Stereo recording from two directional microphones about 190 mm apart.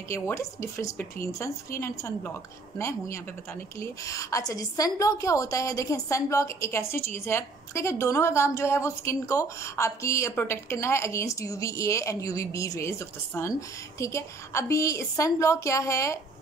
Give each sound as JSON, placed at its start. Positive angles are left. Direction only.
{"t": 0.1, "sound": "a woman's voice", "side_deg": 15}